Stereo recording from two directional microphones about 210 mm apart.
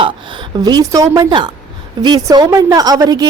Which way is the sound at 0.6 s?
20° right (ahead or behind).